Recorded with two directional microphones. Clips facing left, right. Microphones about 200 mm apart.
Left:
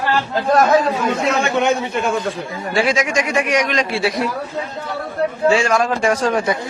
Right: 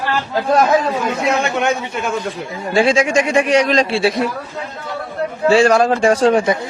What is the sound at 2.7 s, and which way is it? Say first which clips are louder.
Speech: right 4 dB; 30° right (ahead or behind).